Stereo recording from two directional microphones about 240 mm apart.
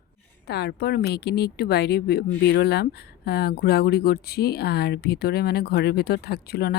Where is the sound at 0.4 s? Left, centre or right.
Left.